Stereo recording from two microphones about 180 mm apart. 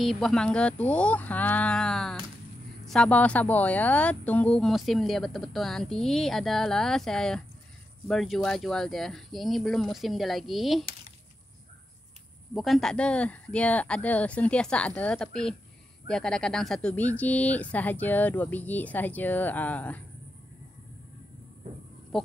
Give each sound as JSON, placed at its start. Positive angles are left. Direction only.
{"t": 0.0, "sound": "speech", "side_deg": 0}
{"t": 12.5, "sound": "speech", "side_deg": 0}
{"t": 22.1, "sound": "a sound", "side_deg": 0}